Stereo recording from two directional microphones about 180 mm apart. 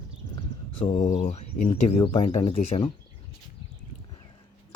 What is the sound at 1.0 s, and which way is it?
Speech, 45° left (ahead or behind).